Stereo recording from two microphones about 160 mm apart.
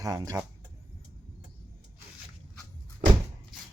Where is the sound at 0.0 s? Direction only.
25° right (ahead or behind).